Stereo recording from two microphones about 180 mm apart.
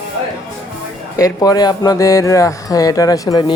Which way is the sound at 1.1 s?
20° left (ahead or behind).